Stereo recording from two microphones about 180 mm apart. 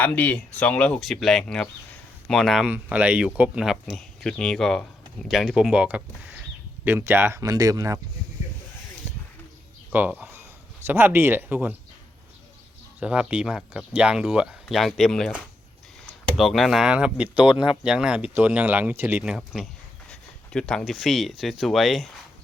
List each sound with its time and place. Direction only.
0.0 s speech: 10° left (ahead or behind); by 7.9 s 20° right (ahead or behind)
9.0 s a sound: 15° right (ahead or behind)
9.9 s speech: 10° right (ahead or behind)
13.0 s speech: 5° right (ahead or behind)
16.4 s speech: centre (ahead or behind)